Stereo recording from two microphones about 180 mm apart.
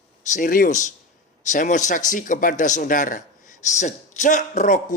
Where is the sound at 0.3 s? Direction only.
45° left (ahead or behind).